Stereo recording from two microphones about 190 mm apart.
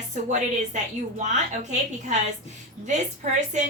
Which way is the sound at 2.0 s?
40° right (ahead or behind).